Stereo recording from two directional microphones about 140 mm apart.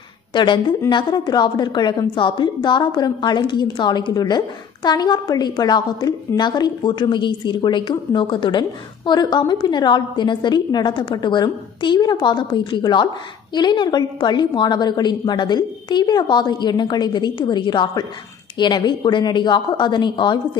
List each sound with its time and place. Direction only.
0.3 s a woman's voice: 35° left (ahead or behind)